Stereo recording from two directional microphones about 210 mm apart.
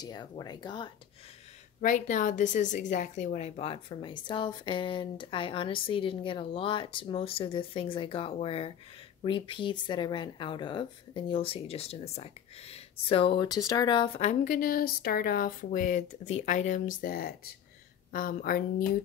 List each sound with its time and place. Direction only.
0.0 s speech: 20° left (ahead or behind)
1.8 s speech: 35° left (ahead or behind)